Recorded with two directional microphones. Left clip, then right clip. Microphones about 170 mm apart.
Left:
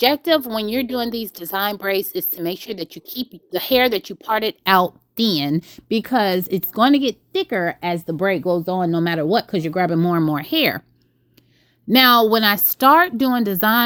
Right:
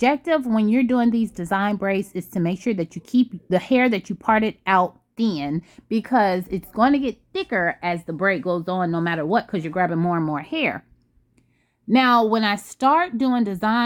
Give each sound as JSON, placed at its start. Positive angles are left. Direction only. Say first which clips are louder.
{"t": 0.0, "sound": "a woman's voice", "louder": "left 3 dB", "side_deg": 25}
{"t": 1.5, "sound": "a woman's voice", "louder": "left 1 dB", "side_deg": 40}
{"t": 1.8, "sound": "a woman's voice", "louder": "left 3 dB", "side_deg": 25}
{"t": 11.9, "sound": "speech", "louder": "left 4 dB", "side_deg": 15}